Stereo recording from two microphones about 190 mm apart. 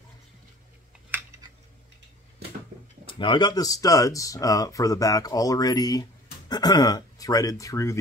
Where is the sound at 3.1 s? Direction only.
25° left (ahead or behind).